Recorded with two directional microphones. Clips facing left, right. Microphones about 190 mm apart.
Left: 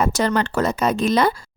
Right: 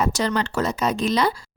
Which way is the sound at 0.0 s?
55° left (ahead or behind).